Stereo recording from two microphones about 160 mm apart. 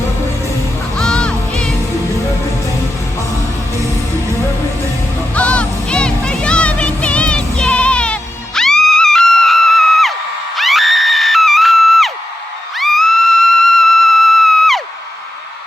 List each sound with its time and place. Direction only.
0.9 s music: 5° left (ahead or behind)
5.3 s music: 10° left (ahead or behind)